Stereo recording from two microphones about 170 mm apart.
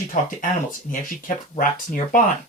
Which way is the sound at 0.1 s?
50° left (ahead or behind).